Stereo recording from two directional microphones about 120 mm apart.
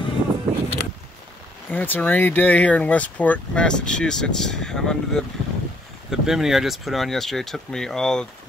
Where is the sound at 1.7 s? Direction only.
15° left (ahead or behind).